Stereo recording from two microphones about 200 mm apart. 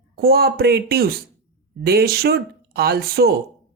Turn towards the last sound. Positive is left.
turn(degrees=-50)  # may be behind; listen again after turning